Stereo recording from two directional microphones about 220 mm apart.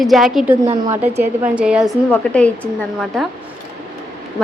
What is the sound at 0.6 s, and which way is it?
Speech, 25° right (ahead or behind).